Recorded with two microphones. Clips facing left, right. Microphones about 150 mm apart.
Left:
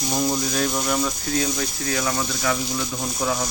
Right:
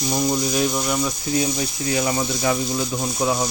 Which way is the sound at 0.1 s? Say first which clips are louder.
Right 2 dB; centre (ahead or behind).